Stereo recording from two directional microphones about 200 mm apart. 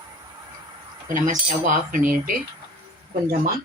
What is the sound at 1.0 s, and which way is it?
Speech, 40° right (ahead or behind).